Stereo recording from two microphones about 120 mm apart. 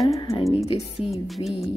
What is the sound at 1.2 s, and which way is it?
Music, centre (ahead or behind).